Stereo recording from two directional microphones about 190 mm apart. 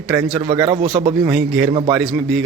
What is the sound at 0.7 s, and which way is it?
Speech, 35° right (ahead or behind).